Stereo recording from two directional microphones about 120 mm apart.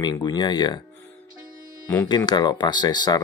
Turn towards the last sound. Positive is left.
turn(degrees=35)  # may be behind; listen again after turning